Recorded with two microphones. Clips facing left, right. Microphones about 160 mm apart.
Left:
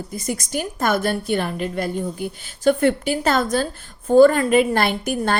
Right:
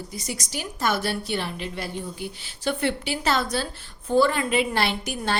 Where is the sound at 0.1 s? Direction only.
50° left (ahead or behind).